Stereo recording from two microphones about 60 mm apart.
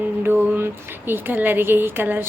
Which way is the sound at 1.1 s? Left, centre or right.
Right.